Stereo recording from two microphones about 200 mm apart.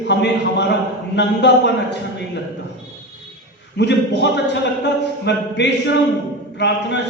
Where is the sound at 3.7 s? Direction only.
60° left (ahead or behind).